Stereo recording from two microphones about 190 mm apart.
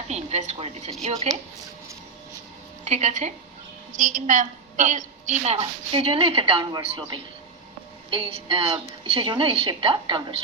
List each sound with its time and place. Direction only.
0.1 s a woman's voice: 35° right (ahead or behind)
2.8 s a woman's voice: 35° right (ahead or behind)